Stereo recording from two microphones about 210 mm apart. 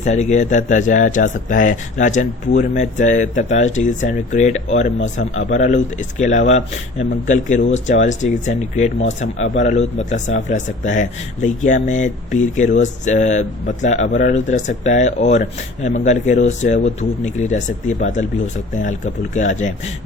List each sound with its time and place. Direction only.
0.0 s speech: 35° left (ahead or behind)